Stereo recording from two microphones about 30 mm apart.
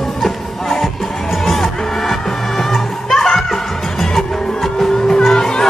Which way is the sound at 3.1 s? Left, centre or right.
Centre.